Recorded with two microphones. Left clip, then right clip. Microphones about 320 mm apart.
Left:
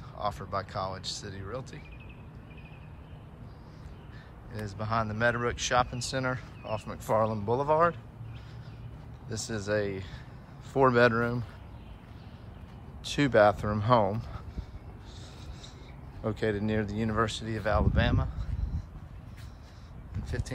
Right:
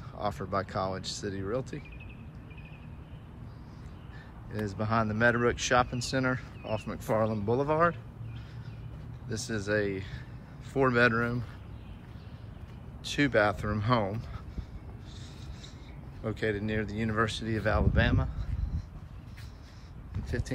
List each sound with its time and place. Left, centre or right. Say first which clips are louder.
0.2 s speech: right 1 dB; centre
4.5 s speech: right 2 dB; centre
9.3 s speech: even; centre
13.0 s speech: left 3 dB; centre
16.3 s speech: left 1 dB; centre
20.2 s speech: right 3 dB; centre